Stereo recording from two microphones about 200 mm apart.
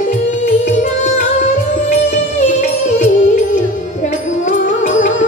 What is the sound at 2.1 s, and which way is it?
Music, 35° left (ahead or behind).